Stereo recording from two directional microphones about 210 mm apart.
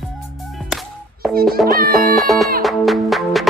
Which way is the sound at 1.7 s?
45° right (ahead or behind).